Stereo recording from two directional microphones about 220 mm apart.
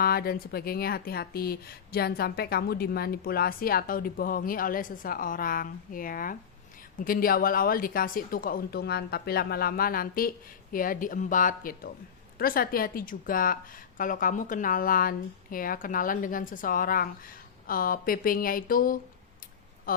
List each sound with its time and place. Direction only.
0.0 s a woman's voice: 45° left (ahead or behind)